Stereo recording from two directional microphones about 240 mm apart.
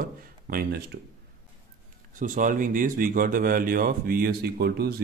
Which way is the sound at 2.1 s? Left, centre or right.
Right.